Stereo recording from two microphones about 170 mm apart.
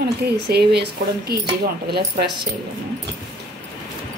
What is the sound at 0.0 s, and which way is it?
Speech, 75° right (ahead or behind).